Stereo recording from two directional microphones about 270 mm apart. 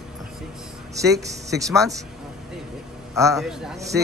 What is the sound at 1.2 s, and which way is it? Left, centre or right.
Speech, centre.